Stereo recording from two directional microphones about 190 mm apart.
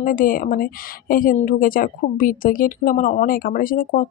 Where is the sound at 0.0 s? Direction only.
45° left (ahead or behind).